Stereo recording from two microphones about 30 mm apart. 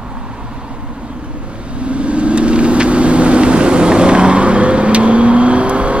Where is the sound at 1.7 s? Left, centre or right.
Right.